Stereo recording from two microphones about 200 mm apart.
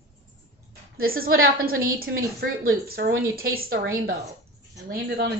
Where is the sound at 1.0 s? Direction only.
50° right (ahead or behind).